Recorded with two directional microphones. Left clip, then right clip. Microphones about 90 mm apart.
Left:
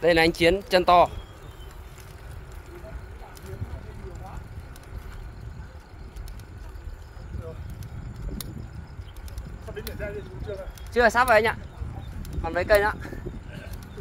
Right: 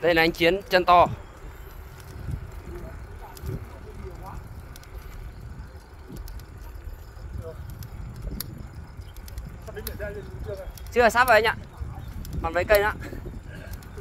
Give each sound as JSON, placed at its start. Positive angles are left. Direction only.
{"t": 0.0, "sound": "speech", "side_deg": 0}
{"t": 9.8, "sound": "a sound", "side_deg": -10}
{"t": 10.9, "sound": "speech", "side_deg": -80}
{"t": 12.4, "sound": "speech", "side_deg": -65}